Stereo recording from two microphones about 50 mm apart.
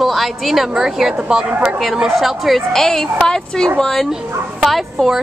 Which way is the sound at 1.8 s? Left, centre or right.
Centre.